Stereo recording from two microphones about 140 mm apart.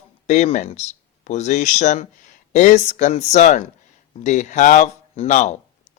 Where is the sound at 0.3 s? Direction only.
55° left (ahead or behind).